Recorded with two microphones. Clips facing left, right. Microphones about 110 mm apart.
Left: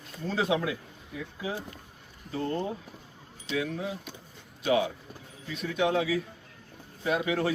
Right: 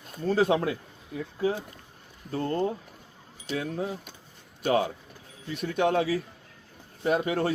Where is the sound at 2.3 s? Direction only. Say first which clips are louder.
Right 3 dB; 40° right (ahead or behind).